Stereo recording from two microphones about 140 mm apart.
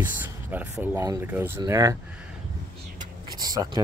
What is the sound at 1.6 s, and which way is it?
Speech, 25° right (ahead or behind).